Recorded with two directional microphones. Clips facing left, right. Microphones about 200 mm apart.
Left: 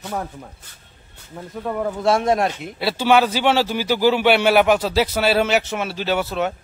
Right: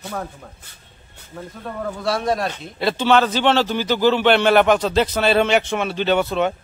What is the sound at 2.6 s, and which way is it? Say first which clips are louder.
Speech: right 2 dB; 10° left (ahead or behind).